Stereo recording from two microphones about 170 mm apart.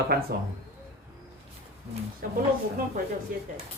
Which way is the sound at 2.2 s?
55° right (ahead or behind).